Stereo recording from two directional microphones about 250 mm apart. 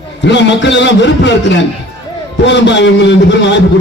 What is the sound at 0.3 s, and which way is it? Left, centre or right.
A man's voice, left.